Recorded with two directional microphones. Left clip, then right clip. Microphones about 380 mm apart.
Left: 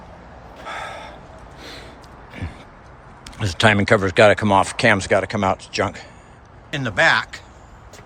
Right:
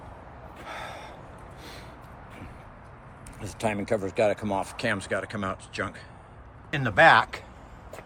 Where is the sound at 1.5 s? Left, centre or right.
Left.